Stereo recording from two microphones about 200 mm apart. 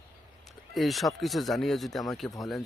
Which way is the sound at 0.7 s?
Centre (ahead or behind).